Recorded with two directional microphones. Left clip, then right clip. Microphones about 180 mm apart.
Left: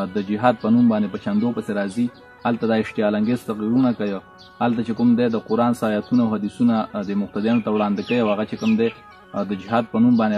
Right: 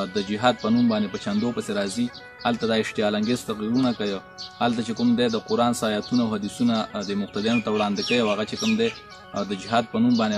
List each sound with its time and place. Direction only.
0.0 s speech: 5° right (ahead or behind)